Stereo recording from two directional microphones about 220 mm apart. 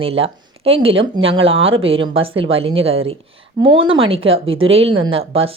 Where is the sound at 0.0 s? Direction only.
25° right (ahead or behind).